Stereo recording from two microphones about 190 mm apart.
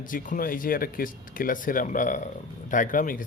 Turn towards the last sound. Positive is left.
turn(degrees=45)  # may be behind; listen again after turning